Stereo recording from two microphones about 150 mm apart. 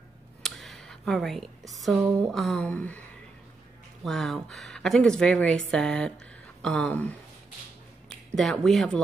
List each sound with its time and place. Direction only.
0.4 s a sound: centre (ahead or behind)
1.7 s speech: centre (ahead or behind)
4.0 s speech: centre (ahead or behind)
8.4 s speech: centre (ahead or behind)